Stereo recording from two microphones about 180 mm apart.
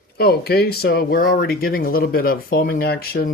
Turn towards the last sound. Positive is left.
turn(degrees=60)  # may be behind; listen again after turning